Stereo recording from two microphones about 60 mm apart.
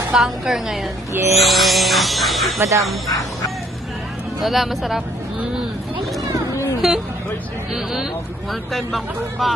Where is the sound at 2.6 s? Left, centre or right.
Right.